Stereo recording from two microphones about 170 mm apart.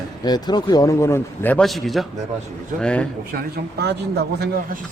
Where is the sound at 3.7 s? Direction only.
75° right (ahead or behind).